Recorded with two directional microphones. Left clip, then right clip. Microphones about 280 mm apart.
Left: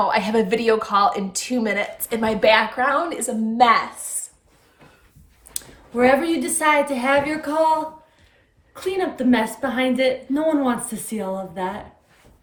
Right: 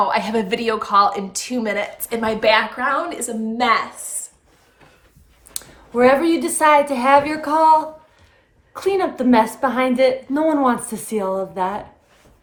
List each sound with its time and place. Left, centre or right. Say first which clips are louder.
0.0 s a woman's voice: even; centre
5.5 s a woman's voice: right 3 dB; centre